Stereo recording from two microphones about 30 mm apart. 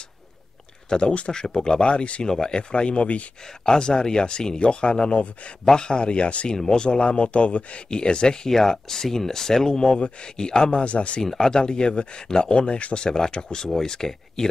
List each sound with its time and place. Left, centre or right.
0.8 s speech: left
1.3 s speech: left
3.6 s speech: left
6.5 s speech: centre
6.8 s speech: left
7.9 s speech: left
8.5 s speech: centre; by 11.1 s left
11.2 s speech: centre; by 13.1 s left
13.3 s speech: left